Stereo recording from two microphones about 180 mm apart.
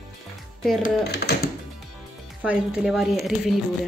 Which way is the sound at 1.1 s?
65° left (ahead or behind).